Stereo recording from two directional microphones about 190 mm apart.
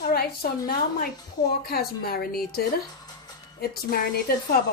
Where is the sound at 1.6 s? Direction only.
55° left (ahead or behind).